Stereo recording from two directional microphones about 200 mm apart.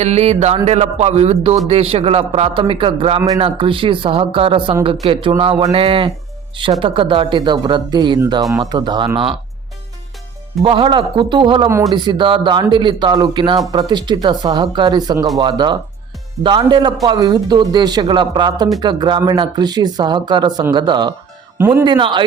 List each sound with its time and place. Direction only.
0.0 s a sound: 35° right (ahead or behind)
1.6 s a man's voice: 30° right (ahead or behind)
10.6 s a man's voice: 25° right (ahead or behind)
21.6 s speech: 10° right (ahead or behind)
21.8 s a man's voice: 25° right (ahead or behind)